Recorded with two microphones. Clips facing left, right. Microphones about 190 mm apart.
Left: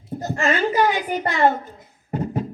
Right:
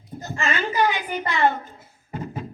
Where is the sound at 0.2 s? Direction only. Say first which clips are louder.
Left 5 dB; 45° left (ahead or behind).